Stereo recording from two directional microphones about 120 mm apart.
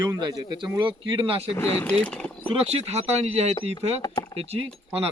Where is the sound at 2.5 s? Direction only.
55° right (ahead or behind).